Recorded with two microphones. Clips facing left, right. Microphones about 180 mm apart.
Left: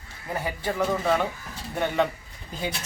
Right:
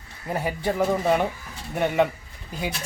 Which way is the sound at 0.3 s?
25° right (ahead or behind).